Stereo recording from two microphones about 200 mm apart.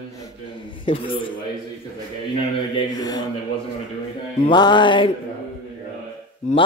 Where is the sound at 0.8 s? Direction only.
25° left (ahead or behind).